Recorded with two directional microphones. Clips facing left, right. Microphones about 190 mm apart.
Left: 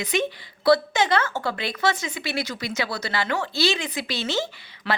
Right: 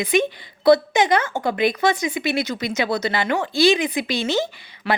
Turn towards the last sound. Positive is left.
turn(degrees=-15)  # may be behind; listen again after turning